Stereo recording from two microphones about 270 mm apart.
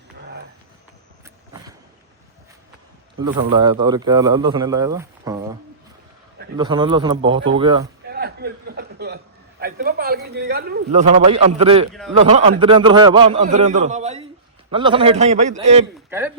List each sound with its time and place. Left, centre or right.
3.2 s speech: centre
6.6 s a man's voice: centre
8.1 s chuckle: right
9.6 s a man's voice: right
16.0 s a man's voice: centre